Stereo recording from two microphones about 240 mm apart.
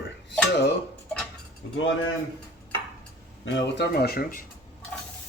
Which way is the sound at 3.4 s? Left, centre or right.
Left.